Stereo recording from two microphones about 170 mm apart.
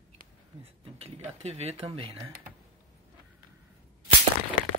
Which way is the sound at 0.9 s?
35° right (ahead or behind).